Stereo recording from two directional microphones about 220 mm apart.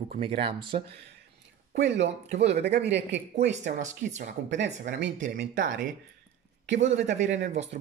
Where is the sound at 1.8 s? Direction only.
50° right (ahead or behind).